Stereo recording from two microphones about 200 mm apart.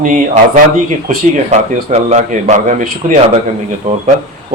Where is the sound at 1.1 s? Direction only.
40° right (ahead or behind).